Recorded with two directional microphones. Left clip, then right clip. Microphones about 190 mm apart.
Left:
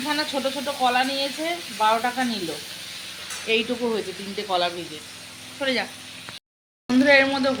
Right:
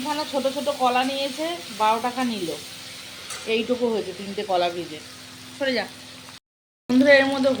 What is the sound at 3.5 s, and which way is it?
Speech, 10° right (ahead or behind).